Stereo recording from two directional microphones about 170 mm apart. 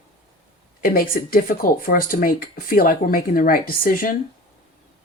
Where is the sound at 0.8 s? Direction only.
60° left (ahead or behind).